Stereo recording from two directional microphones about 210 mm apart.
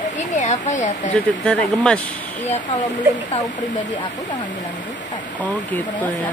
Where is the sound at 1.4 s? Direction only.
5° left (ahead or behind).